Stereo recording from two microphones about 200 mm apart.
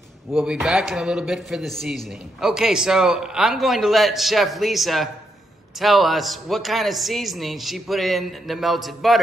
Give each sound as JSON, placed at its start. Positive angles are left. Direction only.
{"t": 0.3, "sound": "speech", "side_deg": -5}